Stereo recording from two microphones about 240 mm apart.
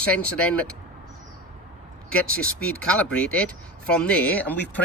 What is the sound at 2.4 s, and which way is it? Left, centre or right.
Speech, centre.